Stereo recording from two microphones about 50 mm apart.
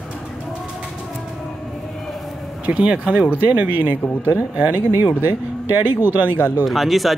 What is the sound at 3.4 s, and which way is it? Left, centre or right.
Speech, right.